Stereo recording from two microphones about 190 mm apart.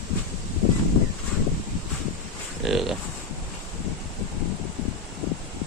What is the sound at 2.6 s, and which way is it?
Speech, centre (ahead or behind).